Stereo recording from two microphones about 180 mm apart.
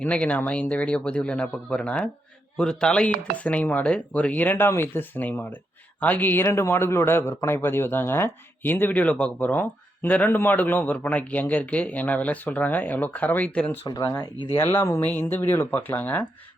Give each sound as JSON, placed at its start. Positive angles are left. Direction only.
{"t": 0.0, "sound": "a man's voice", "side_deg": 10}
{"t": 13.8, "sound": "speech", "side_deg": 20}
{"t": 14.5, "sound": "a man's voice", "side_deg": 10}